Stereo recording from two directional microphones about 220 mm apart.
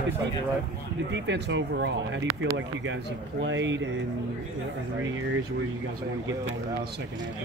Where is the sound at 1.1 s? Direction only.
55° right (ahead or behind).